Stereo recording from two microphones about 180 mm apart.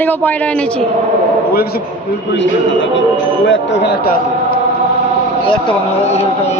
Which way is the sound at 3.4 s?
85° left.